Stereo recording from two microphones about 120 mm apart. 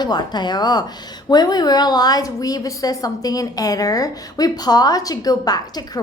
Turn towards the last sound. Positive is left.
turn(degrees=35)  # may be behind; listen again after turning